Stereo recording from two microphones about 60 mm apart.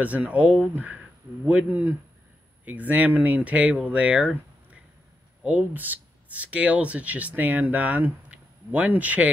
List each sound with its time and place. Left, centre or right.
0.0 s speech: right
1.7 s speech: right
5.7 s speech: right